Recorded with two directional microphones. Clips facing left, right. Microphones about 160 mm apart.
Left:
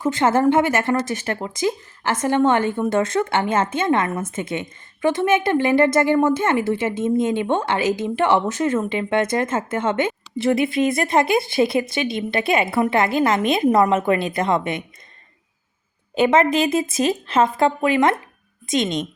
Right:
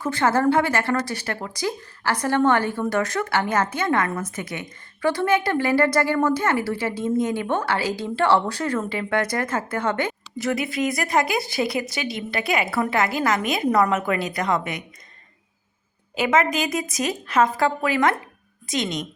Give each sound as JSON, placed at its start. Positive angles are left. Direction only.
{"t": 0.0, "sound": "a woman's voice", "side_deg": 20}
{"t": 16.1, "sound": "a woman's voice", "side_deg": 30}